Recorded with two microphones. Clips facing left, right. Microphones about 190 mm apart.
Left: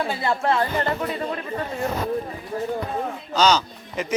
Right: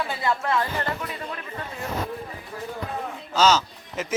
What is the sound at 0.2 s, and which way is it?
Speech, 30° left (ahead or behind).